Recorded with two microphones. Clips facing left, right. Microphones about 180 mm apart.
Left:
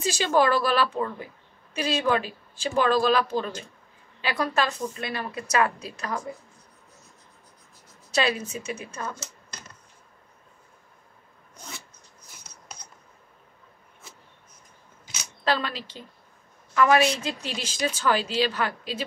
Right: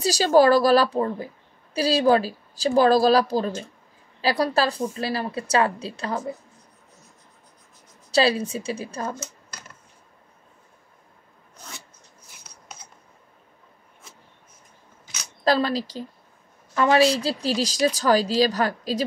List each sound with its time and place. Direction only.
0.0 s a woman's voice: 35° right (ahead or behind)
8.1 s a woman's voice: 30° right (ahead or behind)
15.4 s a woman's voice: 40° right (ahead or behind)